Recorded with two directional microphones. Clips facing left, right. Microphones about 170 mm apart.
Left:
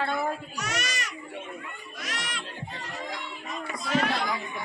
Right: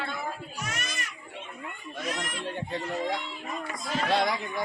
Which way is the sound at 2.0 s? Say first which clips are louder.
Right 4 dB; 90° left.